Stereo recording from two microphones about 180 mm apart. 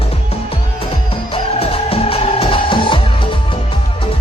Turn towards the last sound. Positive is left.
turn(degrees=30)  # may be behind; listen again after turning